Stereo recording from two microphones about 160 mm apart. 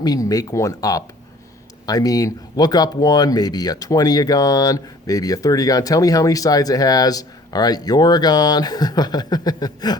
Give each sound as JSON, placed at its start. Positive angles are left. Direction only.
{"t": 0.0, "sound": "speech", "side_deg": 25}